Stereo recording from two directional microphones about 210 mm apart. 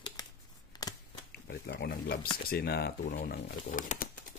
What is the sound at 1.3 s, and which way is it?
Speech, 45° left (ahead or behind).